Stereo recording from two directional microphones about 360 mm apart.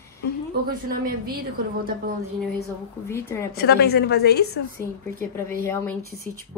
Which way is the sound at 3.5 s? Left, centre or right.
Left.